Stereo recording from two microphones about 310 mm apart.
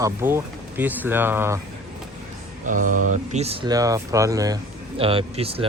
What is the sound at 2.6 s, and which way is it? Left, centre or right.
Speech, right.